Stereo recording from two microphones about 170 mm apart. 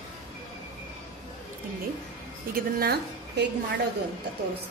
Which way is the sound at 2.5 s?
70° right (ahead or behind).